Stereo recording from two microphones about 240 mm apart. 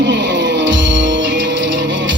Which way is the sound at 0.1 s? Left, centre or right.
Right.